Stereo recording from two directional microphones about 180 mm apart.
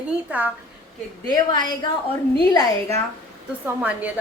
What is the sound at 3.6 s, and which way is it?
Speech, 10° right (ahead or behind).